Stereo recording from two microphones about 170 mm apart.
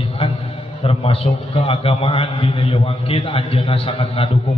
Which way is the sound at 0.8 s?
35° left (ahead or behind).